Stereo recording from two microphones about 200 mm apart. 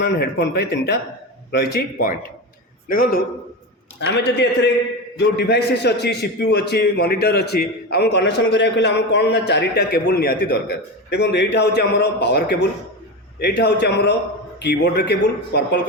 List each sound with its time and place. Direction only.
0.0 s speech: 55° left (ahead or behind)
4.0 s a man's voice: 60° left (ahead or behind)